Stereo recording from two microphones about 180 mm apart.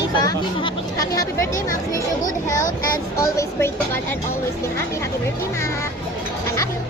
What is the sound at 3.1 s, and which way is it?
Speech, 15° left (ahead or behind).